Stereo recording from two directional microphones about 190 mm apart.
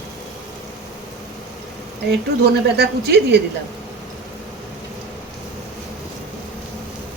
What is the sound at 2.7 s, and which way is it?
Speech, 60° right (ahead or behind).